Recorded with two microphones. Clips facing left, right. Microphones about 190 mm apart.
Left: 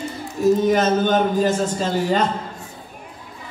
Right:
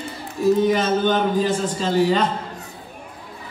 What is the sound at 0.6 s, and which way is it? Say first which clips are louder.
A man's voice: left 1 dB; 45° left (ahead or behind).